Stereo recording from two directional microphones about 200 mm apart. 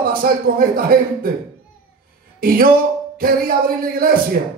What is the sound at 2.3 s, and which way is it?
Speech, 45° right (ahead or behind).